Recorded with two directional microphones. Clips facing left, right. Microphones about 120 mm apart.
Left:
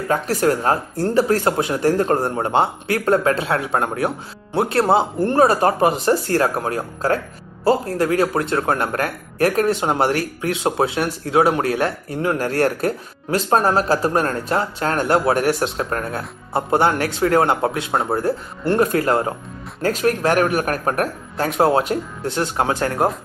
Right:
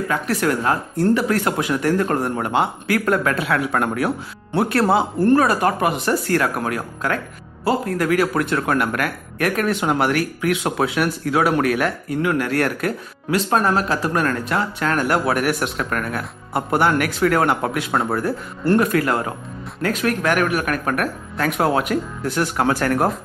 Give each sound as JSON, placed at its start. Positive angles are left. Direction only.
{"t": 0.1, "sound": "speech", "side_deg": 35}